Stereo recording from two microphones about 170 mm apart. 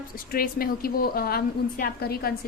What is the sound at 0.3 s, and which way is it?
A woman's voice, 60° left (ahead or behind).